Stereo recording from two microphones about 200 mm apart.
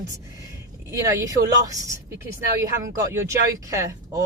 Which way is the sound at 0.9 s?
15° right (ahead or behind).